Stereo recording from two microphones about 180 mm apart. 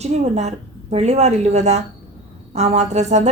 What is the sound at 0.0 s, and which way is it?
A woman's voice, 40° right (ahead or behind).